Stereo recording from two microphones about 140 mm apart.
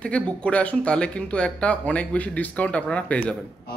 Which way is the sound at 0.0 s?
10° left (ahead or behind).